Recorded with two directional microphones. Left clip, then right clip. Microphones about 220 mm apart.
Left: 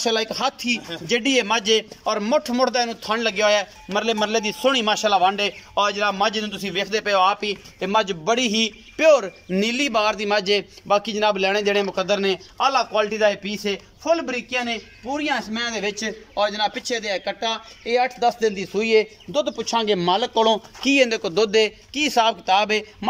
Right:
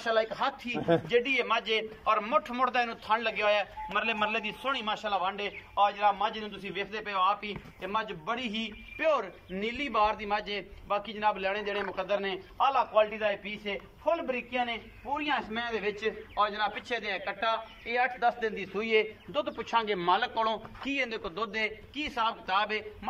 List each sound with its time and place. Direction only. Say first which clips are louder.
0.0 s a man's voice: left 6 dB; 40° left (ahead or behind)
15.1 s a man's voice: left 7 dB; 30° left (ahead or behind)
20.9 s a man's voice: left 14 dB; 45° left (ahead or behind)